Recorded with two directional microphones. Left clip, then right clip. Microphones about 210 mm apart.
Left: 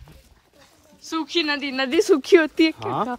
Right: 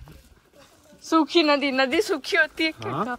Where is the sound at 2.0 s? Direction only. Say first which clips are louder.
Left 6 dB; 35° left (ahead or behind).